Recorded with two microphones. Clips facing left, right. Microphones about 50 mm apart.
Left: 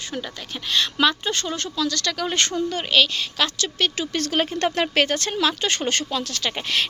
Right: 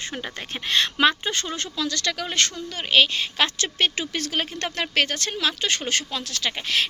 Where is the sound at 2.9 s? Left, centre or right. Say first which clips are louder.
Right 2 dB; centre.